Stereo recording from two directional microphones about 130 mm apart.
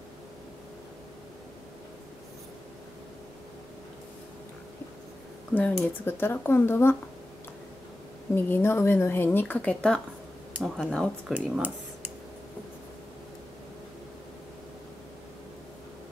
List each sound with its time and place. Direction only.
5.5 s a woman's voice: 10° left (ahead or behind)
8.4 s a woman's voice: 15° left (ahead or behind)
11.3 s speech: 10° right (ahead or behind)